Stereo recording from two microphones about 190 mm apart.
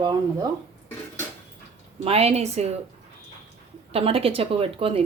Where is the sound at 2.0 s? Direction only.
35° right (ahead or behind).